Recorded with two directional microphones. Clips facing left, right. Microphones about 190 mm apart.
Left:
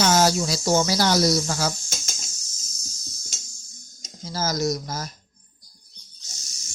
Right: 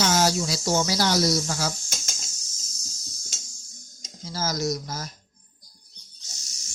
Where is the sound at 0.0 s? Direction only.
50° left (ahead or behind).